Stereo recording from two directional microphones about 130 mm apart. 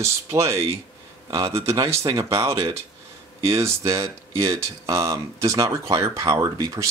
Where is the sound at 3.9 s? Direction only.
25° right (ahead or behind).